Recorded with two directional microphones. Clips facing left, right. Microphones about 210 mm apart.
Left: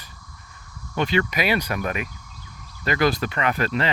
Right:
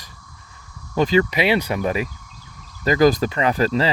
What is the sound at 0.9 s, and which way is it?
Speech, 35° right (ahead or behind).